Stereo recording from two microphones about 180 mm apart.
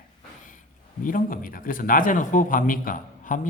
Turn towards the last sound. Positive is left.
turn(degrees=50)  # may be behind; listen again after turning